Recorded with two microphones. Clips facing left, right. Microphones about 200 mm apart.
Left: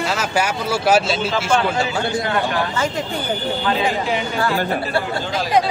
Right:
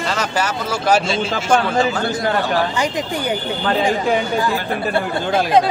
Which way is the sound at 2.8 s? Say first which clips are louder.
Right 1 dB; 15° right (ahead or behind).